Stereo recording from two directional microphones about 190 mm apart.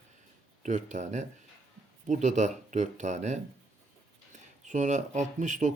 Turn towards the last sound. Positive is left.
turn(degrees=-40)  # may be behind; listen again after turning